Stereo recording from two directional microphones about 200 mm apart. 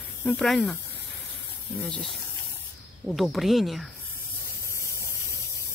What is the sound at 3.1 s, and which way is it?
Speech, centre (ahead or behind).